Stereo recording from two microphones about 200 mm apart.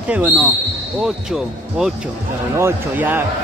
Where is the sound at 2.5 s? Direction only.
10° right (ahead or behind).